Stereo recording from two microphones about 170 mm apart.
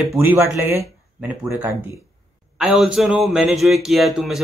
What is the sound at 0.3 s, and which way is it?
Speech, 15° right (ahead or behind).